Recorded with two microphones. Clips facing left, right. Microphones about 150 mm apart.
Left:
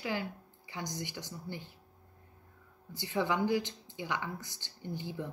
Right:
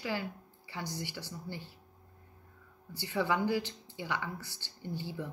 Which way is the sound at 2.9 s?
20° left (ahead or behind).